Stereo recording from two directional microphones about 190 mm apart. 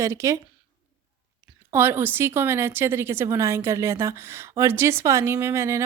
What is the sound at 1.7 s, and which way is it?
A woman's voice, 10° right (ahead or behind).